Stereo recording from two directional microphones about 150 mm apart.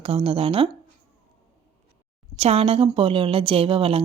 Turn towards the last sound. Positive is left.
turn(degrees=-40)  # may be behind; listen again after turning